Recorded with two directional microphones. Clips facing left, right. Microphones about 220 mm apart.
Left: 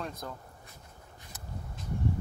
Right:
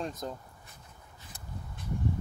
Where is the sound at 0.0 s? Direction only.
20° right (ahead or behind).